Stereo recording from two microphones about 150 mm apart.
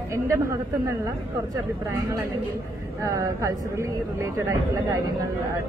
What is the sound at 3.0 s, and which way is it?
Speech, 20° right (ahead or behind).